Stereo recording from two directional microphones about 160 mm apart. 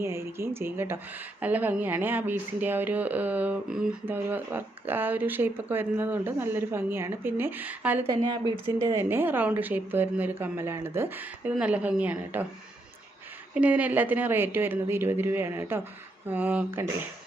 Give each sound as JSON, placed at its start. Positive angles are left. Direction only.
{"t": 0.0, "sound": "speech", "side_deg": -15}
{"t": 8.3, "sound": "speech", "side_deg": -25}
{"t": 13.5, "sound": "speech", "side_deg": -10}